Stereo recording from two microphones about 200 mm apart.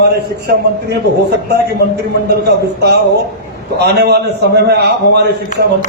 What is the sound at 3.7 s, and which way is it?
A man's voice, 55° right (ahead or behind).